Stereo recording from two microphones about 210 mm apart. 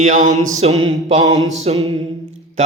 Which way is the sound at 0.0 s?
40° right (ahead or behind).